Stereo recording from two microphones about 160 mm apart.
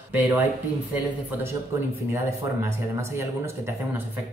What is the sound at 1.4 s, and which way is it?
Speech, 15° right (ahead or behind).